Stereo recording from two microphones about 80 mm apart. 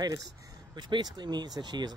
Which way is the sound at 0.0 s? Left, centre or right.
Right.